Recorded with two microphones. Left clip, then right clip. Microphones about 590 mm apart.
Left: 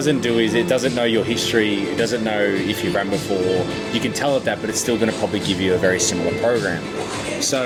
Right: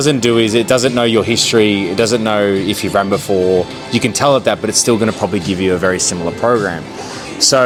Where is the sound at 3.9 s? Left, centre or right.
Right.